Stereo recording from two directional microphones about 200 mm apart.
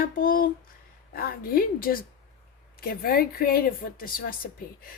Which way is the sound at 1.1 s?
50° left (ahead or behind).